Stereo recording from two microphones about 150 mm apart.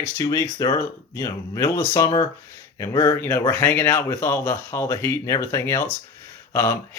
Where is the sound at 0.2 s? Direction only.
20° left (ahead or behind).